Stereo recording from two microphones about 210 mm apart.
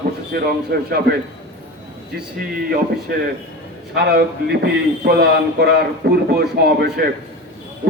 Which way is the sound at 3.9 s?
50° right (ahead or behind).